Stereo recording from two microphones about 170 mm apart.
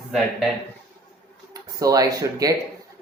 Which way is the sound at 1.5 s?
20° right (ahead or behind).